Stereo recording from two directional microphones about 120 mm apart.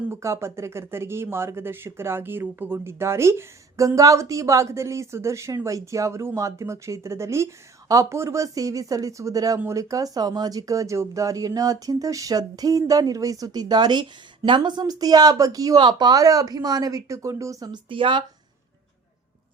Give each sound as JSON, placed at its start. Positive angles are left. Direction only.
{"t": 0.1, "sound": "speech", "side_deg": -25}
{"t": 17.8, "sound": "speech", "side_deg": -45}